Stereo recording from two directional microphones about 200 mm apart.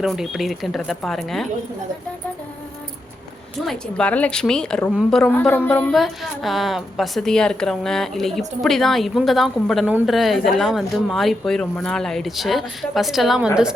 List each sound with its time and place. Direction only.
0.0 s a woman's voice: centre (ahead or behind)
3.7 s a woman's voice: 5° left (ahead or behind)